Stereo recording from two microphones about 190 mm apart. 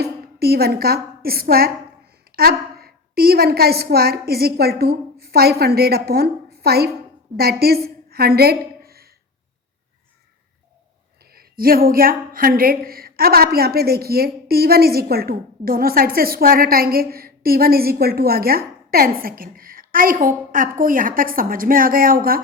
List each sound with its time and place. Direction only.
0.0 s a woman's voice: 55° right (ahead or behind)
11.3 s speech: 50° right (ahead or behind)